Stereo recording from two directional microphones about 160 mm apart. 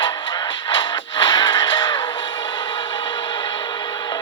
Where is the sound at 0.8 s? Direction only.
30° left (ahead or behind).